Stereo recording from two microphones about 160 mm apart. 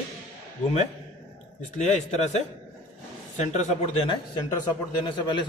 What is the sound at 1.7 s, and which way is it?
A man's voice, 45° left (ahead or behind).